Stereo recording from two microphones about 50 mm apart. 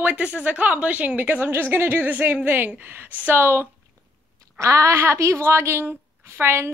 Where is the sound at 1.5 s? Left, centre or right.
Right.